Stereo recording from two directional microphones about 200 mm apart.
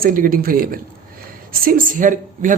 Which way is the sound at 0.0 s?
45° right (ahead or behind).